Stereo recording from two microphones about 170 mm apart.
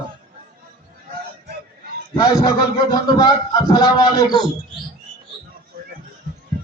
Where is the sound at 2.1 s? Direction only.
20° left (ahead or behind).